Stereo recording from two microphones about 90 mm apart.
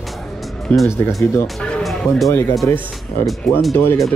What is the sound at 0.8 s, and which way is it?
Speech, 30° left (ahead or behind).